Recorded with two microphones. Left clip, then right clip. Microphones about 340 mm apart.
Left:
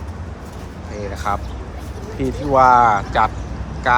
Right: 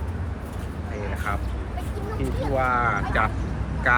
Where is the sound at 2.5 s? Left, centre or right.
Left.